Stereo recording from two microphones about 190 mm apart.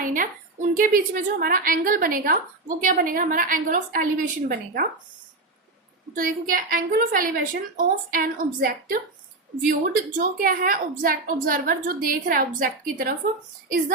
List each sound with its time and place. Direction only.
0.0 s a woman's voice: 45° right (ahead or behind)
6.1 s a woman's voice: 45° right (ahead or behind)